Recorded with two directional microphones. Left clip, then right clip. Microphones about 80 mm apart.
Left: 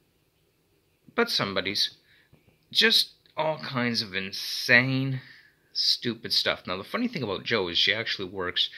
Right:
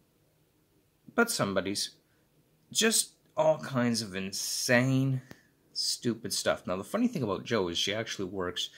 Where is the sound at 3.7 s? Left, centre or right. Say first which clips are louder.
Left 3 dB; right.